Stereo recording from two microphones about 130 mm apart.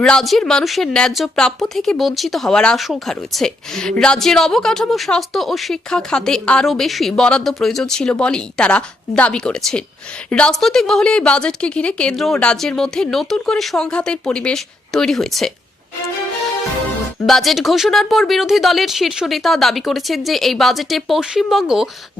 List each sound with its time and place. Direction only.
0.0 s speech: 5° left (ahead or behind)
17.2 s speech: centre (ahead or behind)